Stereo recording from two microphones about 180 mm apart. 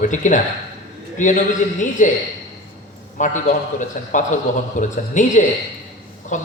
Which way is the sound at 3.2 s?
45° left (ahead or behind).